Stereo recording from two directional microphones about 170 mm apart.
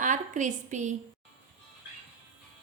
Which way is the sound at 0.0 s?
45° right (ahead or behind).